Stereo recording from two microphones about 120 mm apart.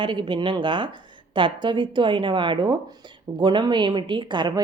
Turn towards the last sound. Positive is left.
turn(degrees=-40)  # may be behind; listen again after turning